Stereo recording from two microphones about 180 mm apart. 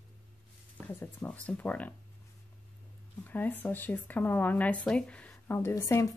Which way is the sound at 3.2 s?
10° left (ahead or behind).